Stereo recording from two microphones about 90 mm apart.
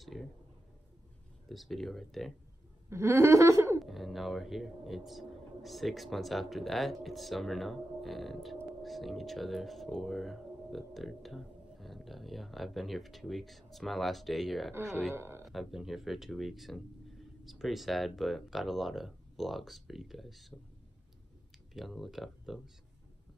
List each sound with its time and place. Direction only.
0.0 s a sound: centre (ahead or behind)
1.5 s speech: centre (ahead or behind)
2.9 s laughter: 30° right (ahead or behind)
3.8 s speech: centre (ahead or behind)
15.1 s speech: 25° right (ahead or behind)
15.4 s speech: centre (ahead or behind)
21.7 s speech: centre (ahead or behind)